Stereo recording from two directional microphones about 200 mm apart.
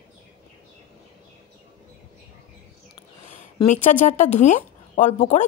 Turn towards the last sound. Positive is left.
turn(degrees=40)  # may be behind; listen again after turning